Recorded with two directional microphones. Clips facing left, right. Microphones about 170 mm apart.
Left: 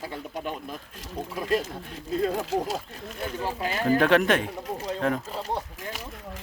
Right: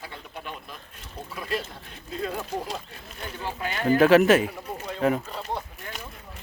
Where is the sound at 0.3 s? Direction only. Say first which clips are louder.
Left 5 dB; 40° left (ahead or behind).